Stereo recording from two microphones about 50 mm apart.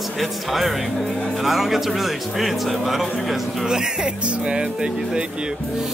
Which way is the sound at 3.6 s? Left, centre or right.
Centre.